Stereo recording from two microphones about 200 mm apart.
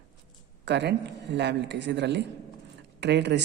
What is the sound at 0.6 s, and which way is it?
A woman's voice, 60° right (ahead or behind).